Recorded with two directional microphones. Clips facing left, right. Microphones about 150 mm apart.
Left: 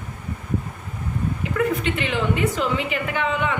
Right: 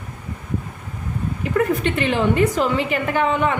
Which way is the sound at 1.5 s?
45° right (ahead or behind).